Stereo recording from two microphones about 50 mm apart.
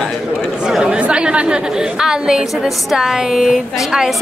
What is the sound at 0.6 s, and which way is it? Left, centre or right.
Speech, centre.